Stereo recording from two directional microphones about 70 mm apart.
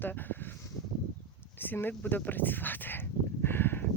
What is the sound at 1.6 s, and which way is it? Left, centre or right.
Speech, left.